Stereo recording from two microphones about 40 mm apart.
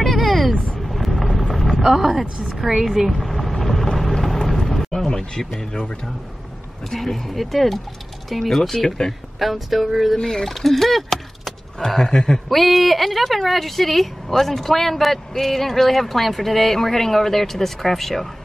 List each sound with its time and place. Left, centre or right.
0.0 s vehicle: centre
1.9 s a woman's voice: centre
3.1 s vehicle: centre
5.4 s speech: centre
6.9 s a woman's voice: centre
8.5 s speech: centre
9.4 s a woman's voice: centre
10.1 s speech: centre
10.5 s speech: centre
12.4 s a woman's voice: centre